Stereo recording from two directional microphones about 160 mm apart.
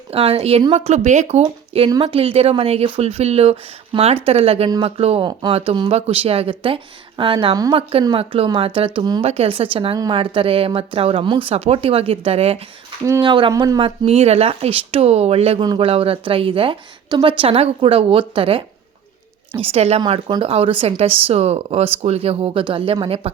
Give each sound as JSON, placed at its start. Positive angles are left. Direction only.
{"t": 0.1, "sound": "a woman's voice", "side_deg": -35}